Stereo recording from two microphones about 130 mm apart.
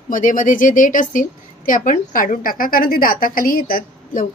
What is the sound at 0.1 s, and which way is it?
A woman's voice, 90° left.